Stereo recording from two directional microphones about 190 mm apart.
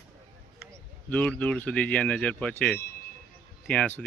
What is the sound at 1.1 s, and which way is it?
Speech, 5° left (ahead or behind).